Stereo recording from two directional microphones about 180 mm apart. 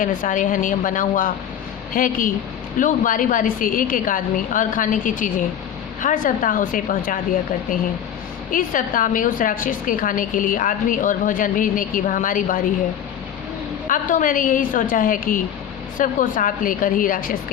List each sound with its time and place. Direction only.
0.0 s a woman's voice: 50° left (ahead or behind)
8.4 s a woman's voice: 50° left (ahead or behind)
13.8 s a woman's voice: 45° left (ahead or behind)